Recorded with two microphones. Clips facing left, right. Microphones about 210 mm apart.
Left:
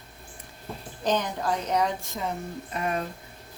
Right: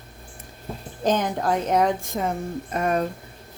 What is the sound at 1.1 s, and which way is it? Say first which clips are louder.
A woman's voice: right 4 dB; 50° right (ahead or behind).